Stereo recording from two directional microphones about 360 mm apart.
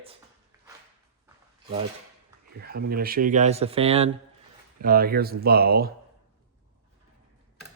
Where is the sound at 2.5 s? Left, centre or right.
Right.